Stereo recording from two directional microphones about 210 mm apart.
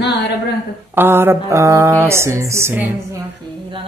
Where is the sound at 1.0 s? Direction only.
10° right (ahead or behind).